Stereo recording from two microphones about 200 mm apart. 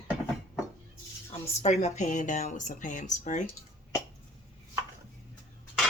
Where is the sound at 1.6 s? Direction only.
35° left (ahead or behind).